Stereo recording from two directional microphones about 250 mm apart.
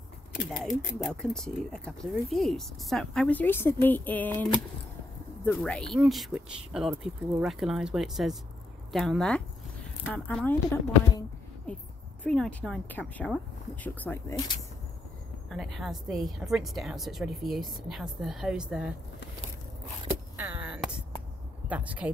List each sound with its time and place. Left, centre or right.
0.5 s speech: centre
11.7 s speech: centre
15.5 s speech: centre
20.1 s a sound: centre
21.6 s speech: centre